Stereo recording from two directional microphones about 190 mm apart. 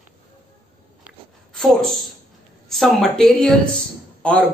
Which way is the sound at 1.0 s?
Centre (ahead or behind).